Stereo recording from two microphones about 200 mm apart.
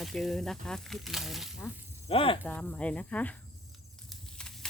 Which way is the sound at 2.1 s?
30° left (ahead or behind).